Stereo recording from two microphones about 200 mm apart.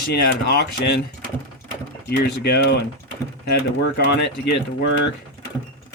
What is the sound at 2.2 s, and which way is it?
Speech, 50° left (ahead or behind).